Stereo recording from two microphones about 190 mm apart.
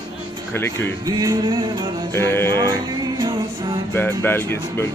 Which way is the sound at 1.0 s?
20° right (ahead or behind).